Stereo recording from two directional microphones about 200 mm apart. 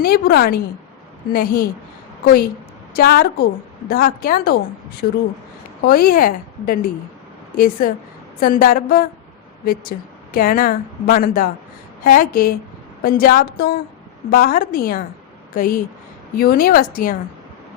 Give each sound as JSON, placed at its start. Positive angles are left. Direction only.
{"t": 0.0, "sound": "a woman's voice", "side_deg": 50}
{"t": 2.9, "sound": "a woman's voice", "side_deg": 50}
{"t": 5.8, "sound": "a woman's voice", "side_deg": 45}